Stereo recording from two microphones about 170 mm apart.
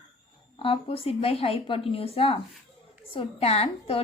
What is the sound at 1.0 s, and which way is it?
A woman's voice, 35° left (ahead or behind).